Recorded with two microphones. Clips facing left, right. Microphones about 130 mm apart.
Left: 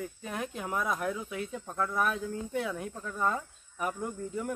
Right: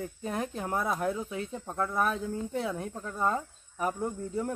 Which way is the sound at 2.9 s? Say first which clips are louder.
Right 2 dB; 20° right (ahead or behind).